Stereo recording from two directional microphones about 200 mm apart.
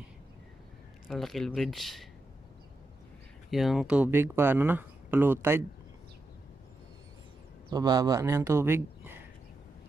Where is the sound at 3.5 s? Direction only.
Centre (ahead or behind).